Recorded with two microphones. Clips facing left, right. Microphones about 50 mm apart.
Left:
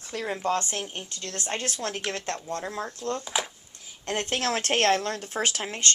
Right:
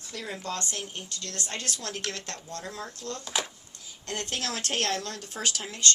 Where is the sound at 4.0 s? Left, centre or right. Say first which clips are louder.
Left 6 dB; left.